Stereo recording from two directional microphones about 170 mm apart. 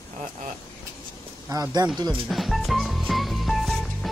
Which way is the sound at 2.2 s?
Centre (ahead or behind).